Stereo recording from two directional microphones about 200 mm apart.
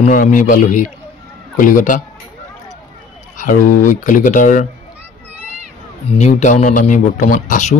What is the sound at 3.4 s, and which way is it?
Speech, 40° left (ahead or behind).